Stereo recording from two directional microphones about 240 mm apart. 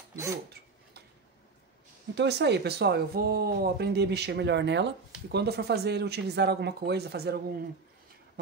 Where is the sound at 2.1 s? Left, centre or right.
Right.